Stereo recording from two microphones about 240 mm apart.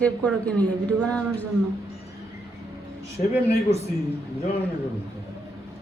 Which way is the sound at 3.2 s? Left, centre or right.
Left.